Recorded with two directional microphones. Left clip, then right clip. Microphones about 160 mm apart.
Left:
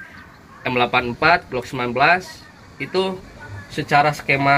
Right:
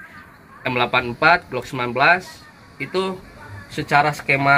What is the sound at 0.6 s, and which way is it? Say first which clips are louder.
Speech: left 1 dB; 55° right (ahead or behind).